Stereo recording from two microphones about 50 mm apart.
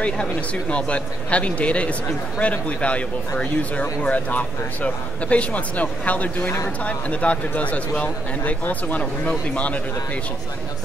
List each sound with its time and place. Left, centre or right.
0.0 s a man's voice: left
8.6 s speech: left